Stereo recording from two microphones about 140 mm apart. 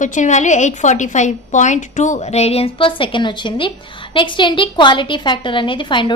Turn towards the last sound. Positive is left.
turn(degrees=35)  # may be behind; listen again after turning